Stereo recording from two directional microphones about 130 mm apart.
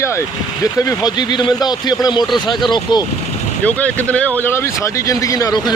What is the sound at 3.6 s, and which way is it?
Speech, 10° left (ahead or behind).